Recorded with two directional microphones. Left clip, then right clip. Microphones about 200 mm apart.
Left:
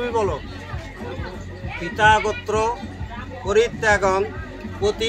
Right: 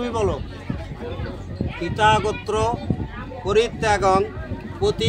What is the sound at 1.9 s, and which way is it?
Speech, 55° right (ahead or behind).